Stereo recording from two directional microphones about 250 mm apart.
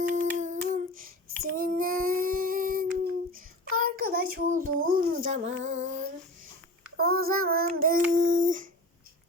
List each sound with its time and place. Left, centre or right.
0.1 s humming: right
3.3 s child singing: right
6.9 s child singing: right
8.1 s a sound: right